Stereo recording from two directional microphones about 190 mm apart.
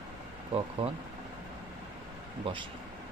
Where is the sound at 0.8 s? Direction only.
30° right (ahead or behind).